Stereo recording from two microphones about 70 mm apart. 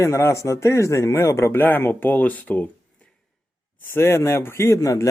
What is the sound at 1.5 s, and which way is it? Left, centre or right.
Speech, left.